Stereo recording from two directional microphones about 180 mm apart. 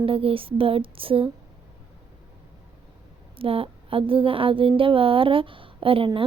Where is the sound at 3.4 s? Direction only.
30° right (ahead or behind).